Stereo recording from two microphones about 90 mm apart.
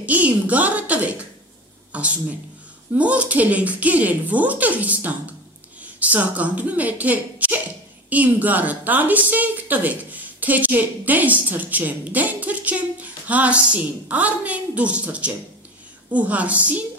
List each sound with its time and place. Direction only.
0.0 s a woman's voice: 15° right (ahead or behind)